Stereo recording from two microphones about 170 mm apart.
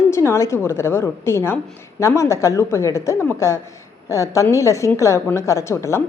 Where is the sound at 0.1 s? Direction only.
15° left (ahead or behind).